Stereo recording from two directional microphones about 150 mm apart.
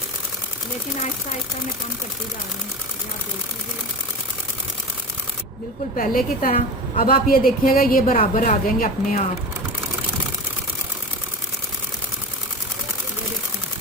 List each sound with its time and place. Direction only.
6.0 s a woman's voice: 65° left (ahead or behind)